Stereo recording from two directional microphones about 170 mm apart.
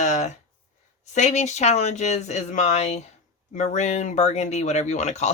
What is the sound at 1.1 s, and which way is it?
Speech, 40° left (ahead or behind).